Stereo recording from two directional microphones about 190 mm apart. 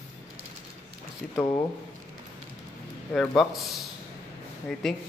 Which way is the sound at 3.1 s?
Centre (ahead or behind).